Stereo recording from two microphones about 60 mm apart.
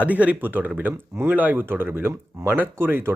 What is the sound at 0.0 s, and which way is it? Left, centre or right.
Speech, right.